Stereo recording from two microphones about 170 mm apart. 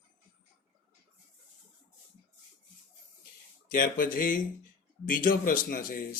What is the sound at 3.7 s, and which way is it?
A man's voice, 55° left (ahead or behind).